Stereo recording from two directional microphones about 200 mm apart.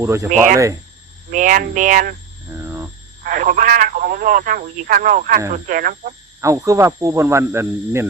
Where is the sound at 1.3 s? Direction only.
40° right (ahead or behind).